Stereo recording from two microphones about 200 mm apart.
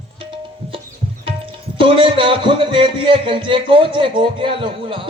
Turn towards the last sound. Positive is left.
turn(degrees=-25)  # may be behind; listen again after turning